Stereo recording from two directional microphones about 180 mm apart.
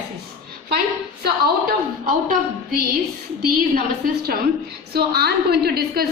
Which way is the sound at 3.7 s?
55° right (ahead or behind).